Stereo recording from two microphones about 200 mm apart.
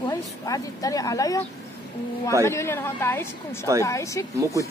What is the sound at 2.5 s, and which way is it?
A woman's voice, 15° left (ahead or behind).